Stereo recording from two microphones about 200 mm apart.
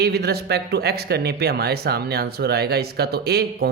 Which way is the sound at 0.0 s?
55° right (ahead or behind).